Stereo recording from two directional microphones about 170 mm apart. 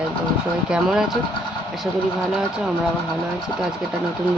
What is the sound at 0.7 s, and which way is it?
Speech, 5° right (ahead or behind).